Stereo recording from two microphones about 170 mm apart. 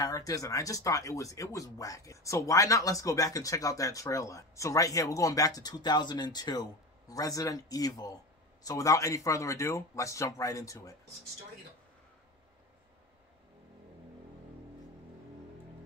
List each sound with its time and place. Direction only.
0.0 s speech: 20° left (ahead or behind)